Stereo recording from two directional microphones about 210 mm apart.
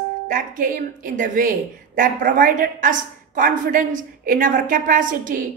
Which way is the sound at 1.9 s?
40° right (ahead or behind).